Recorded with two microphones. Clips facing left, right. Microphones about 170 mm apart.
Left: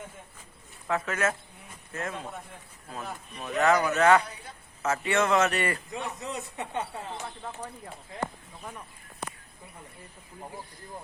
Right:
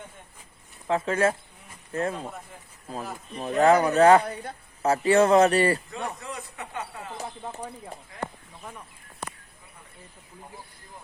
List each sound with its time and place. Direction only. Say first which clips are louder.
0.9 s speech: right 5 dB; 30° right (ahead or behind)
3.3 s speech: right 5 dB; 30° right (ahead or behind)
5.9 s speech: right 1 dB; 20° left (ahead or behind)